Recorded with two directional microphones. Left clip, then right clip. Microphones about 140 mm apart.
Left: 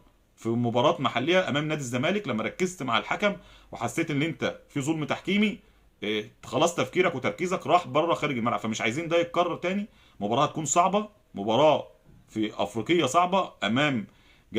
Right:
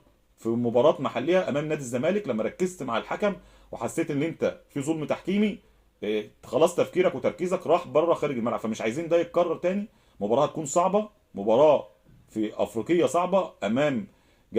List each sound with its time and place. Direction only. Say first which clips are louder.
0.3 s speech: right 3 dB; 20° left (ahead or behind)
12.3 s speech: right 1 dB; 15° left (ahead or behind)